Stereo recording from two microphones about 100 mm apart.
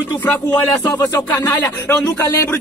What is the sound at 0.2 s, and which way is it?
Speech, 20° left (ahead or behind).